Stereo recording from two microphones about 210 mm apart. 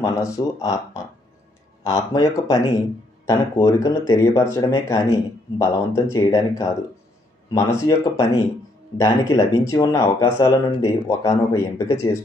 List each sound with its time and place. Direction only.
0.0 s speech: 15° left (ahead or behind)
1.8 s speech: 15° left (ahead or behind)